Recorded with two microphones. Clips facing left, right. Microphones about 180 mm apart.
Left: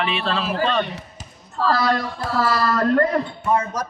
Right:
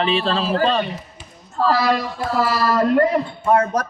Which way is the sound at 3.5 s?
60° right (ahead or behind).